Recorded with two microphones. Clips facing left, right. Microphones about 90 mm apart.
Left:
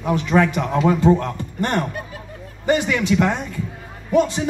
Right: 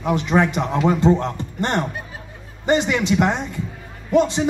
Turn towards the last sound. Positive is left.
turn(degrees=-20)  # may be behind; listen again after turning